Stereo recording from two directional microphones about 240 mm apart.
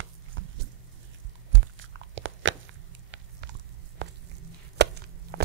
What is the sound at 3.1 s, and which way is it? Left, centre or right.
Walk, right.